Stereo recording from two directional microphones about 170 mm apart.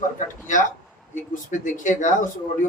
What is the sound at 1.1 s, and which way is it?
A man's voice, 50° left (ahead or behind).